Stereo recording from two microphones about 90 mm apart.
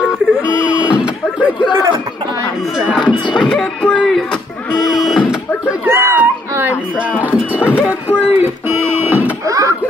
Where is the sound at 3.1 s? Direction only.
60° left (ahead or behind).